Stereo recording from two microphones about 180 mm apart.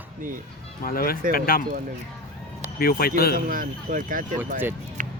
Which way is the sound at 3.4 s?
50° right (ahead or behind).